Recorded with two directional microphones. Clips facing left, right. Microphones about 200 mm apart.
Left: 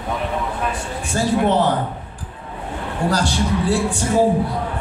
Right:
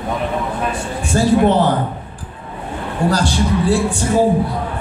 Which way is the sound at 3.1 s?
30° right (ahead or behind).